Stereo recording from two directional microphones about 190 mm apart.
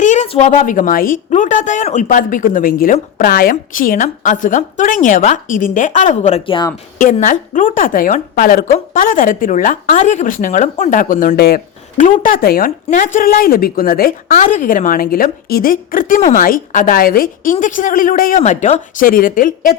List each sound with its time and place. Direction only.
0.0 s a woman's voice: 40° left (ahead or behind)